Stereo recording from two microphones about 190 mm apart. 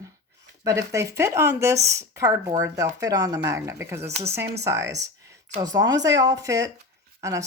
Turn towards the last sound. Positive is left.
turn(degrees=-15)  # may be behind; listen again after turning